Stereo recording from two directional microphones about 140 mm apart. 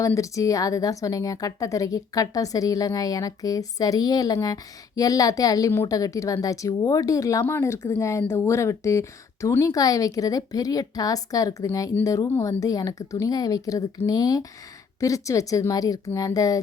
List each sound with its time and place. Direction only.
0.0 s a woman's voice: 25° left (ahead or behind)